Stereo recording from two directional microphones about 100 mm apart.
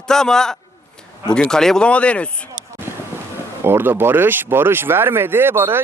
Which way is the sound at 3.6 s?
20° right (ahead or behind).